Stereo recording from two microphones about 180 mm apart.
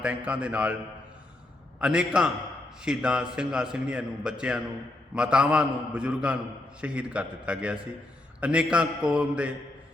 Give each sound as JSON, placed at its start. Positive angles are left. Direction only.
{"t": 0.0, "sound": "a man's voice", "side_deg": -5}
{"t": 1.8, "sound": "a man's voice", "side_deg": -5}